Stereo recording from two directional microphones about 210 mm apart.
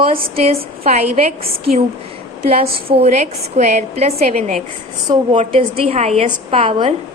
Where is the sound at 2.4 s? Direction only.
30° right (ahead or behind).